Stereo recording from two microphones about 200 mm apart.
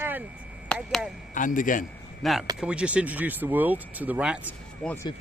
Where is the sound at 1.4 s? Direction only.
40° left (ahead or behind).